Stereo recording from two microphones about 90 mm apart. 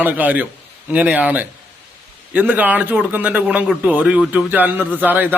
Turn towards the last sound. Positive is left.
turn(degrees=-20)  # may be behind; listen again after turning